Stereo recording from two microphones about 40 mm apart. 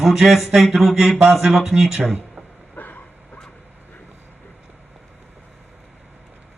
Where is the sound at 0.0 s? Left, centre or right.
Centre.